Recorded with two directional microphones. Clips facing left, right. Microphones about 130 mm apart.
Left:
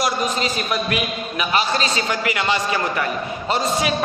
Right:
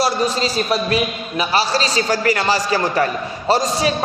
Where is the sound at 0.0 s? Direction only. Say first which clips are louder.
Right 3 dB; 35° right (ahead or behind).